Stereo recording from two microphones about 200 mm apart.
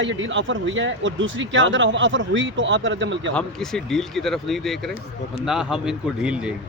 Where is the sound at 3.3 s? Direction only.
Centre (ahead or behind).